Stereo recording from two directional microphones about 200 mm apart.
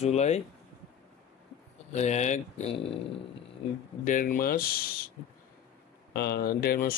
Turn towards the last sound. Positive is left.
turn(degrees=45)  # may be behind; listen again after turning